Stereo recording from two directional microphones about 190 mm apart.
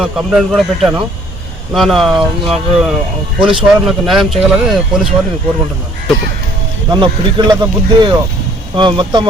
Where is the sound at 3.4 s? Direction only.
25° right (ahead or behind).